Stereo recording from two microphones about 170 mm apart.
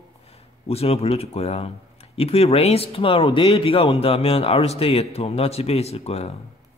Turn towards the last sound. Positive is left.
turn(degrees=35)  # may be behind; listen again after turning